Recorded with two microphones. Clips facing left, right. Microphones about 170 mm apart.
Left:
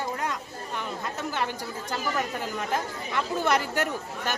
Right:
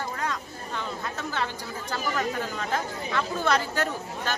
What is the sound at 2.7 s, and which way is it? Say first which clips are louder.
Speech: right 1 dB; 15° left (ahead or behind).